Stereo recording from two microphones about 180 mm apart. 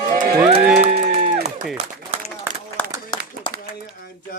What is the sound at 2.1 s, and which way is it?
Run, 35° right (ahead or behind).